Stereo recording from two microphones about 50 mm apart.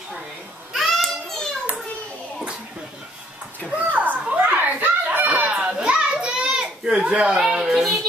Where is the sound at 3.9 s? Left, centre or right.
Right.